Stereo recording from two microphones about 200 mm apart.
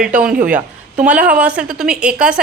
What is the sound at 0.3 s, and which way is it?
Speech, 45° right (ahead or behind).